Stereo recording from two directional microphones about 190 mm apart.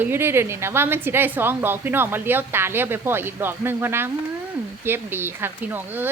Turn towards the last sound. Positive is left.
turn(degrees=-10)  # may be behind; listen again after turning